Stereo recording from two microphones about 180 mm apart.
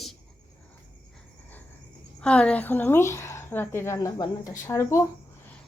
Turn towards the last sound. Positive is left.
turn(degrees=15)  # may be behind; listen again after turning